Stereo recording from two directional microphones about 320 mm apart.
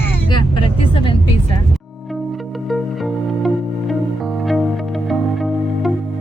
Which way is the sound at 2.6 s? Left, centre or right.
Centre.